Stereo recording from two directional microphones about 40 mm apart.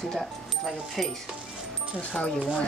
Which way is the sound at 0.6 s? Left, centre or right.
Centre.